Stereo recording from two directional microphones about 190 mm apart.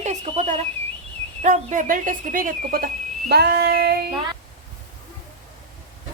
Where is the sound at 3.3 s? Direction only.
60° right (ahead or behind).